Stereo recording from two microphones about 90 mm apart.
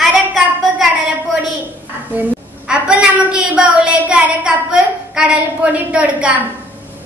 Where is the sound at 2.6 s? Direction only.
10° right (ahead or behind).